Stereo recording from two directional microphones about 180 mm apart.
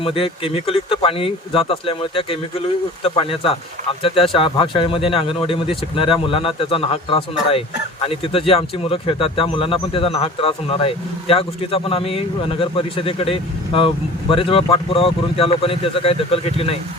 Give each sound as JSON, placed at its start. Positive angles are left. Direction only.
{"t": 0.0, "sound": "speech", "side_deg": 30}